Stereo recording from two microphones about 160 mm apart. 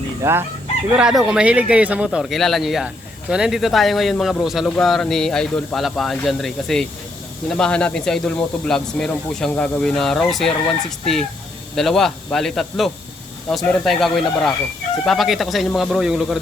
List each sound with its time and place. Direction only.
0.2 s chicken: 15° right (ahead or behind)
0.9 s speech: 5° right (ahead or behind)